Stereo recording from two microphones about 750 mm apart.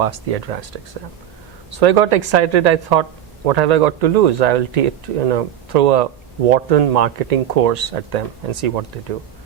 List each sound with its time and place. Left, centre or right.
0.0 s speech: right
1.8 s speech: right